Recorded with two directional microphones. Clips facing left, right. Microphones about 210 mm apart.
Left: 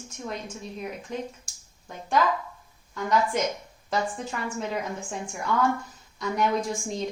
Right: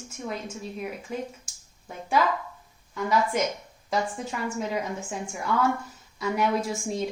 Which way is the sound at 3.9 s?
10° right (ahead or behind).